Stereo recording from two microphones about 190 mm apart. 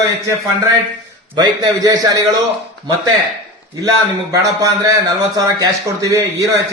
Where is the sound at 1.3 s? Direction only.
20° right (ahead or behind).